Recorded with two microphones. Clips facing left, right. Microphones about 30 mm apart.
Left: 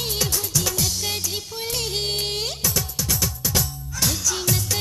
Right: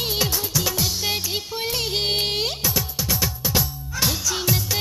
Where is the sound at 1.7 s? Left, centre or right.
Centre.